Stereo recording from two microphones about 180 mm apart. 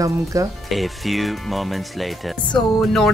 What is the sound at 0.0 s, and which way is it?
Speech, 20° right (ahead or behind).